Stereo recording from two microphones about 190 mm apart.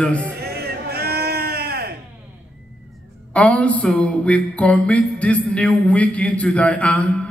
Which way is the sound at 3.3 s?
5° left (ahead or behind).